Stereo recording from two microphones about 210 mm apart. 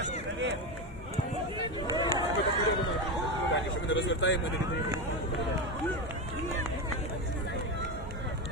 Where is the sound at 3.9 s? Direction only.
60° left (ahead or behind).